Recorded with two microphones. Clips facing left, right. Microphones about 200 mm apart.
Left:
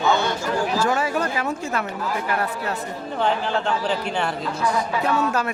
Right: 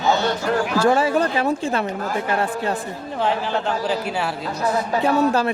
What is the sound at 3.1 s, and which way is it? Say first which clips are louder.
Speech: even; 5° right (ahead or behind).